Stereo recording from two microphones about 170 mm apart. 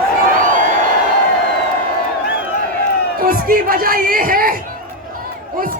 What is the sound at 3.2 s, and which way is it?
Speech, 60° right (ahead or behind).